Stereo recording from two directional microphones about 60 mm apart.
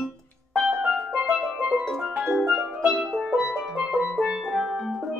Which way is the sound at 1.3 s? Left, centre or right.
Centre.